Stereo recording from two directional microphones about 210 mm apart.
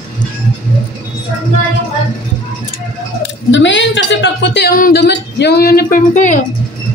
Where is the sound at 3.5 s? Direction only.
60° left (ahead or behind); by 6.4 s 35° left (ahead or behind).